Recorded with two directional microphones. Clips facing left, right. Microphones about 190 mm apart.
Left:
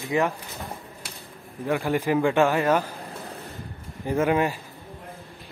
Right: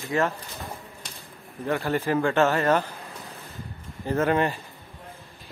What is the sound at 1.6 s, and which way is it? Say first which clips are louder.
A man's voice: left 1 dB; 10° left (ahead or behind).